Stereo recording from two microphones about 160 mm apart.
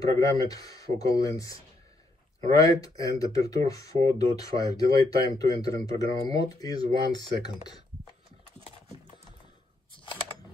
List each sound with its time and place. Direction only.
0.0 s speech: 20° left (ahead or behind)